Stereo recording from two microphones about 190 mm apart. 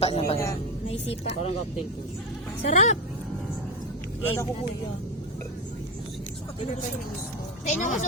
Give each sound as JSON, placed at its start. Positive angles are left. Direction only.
{"t": 0.0, "sound": "speech", "side_deg": 30}
{"t": 2.6, "sound": "speech", "side_deg": 40}
{"t": 4.2, "sound": "speech", "side_deg": 10}
{"t": 7.6, "sound": "speech", "side_deg": 35}